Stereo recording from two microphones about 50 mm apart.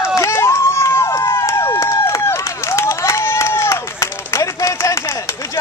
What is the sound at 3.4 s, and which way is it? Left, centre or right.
Run, left.